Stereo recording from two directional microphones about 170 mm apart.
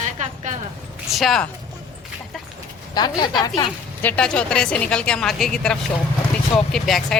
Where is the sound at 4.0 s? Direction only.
10° left (ahead or behind).